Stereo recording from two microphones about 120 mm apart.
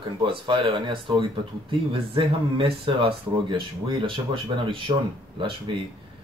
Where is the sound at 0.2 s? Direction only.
45° right (ahead or behind).